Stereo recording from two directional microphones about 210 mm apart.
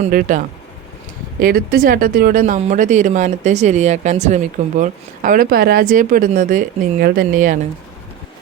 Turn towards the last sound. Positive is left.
turn(degrees=-40)  # may be behind; listen again after turning